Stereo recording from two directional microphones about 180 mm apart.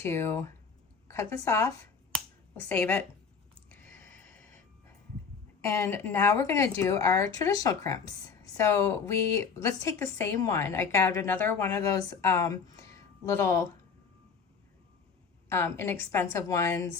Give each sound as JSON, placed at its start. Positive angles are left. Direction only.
{"t": 0.0, "sound": "a woman's voice", "side_deg": 15}
{"t": 2.1, "sound": "finger snapping", "side_deg": 5}
{"t": 3.7, "sound": "a sound", "side_deg": 10}
{"t": 5.6, "sound": "a woman's voice", "side_deg": 15}
{"t": 15.4, "sound": "a woman's voice", "side_deg": 15}